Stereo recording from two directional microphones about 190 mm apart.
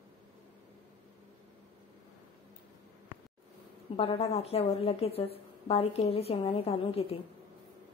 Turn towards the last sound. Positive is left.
turn(degrees=30)  # may be behind; listen again after turning